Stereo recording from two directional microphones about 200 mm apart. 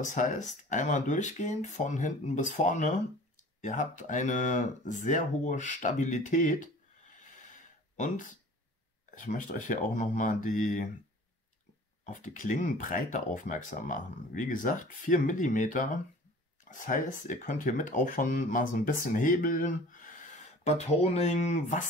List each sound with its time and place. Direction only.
0.0 s speech: 40° left (ahead or behind)
9.1 s speech: 40° left (ahead or behind)
12.1 s speech: 40° left (ahead or behind)